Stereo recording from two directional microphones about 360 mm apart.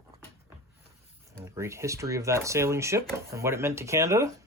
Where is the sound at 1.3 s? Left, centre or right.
Centre.